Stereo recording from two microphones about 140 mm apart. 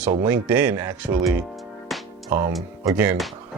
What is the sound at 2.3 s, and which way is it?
Speech, 15° right (ahead or behind).